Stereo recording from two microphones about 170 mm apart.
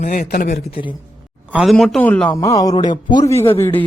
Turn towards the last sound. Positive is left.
turn(degrees=15)  # may be behind; listen again after turning